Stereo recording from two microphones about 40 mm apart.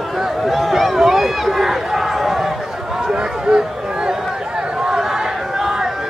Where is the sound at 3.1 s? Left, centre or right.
Right.